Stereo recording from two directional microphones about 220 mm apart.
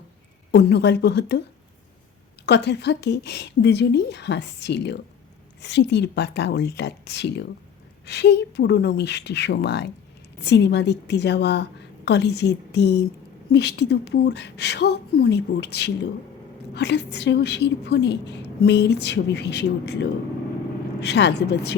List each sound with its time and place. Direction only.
0.5 s a woman's voice: 50° left (ahead or behind)
2.5 s a woman's voice: 50° left (ahead or behind)